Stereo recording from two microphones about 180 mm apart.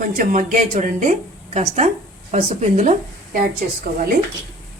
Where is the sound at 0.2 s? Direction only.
50° right (ahead or behind).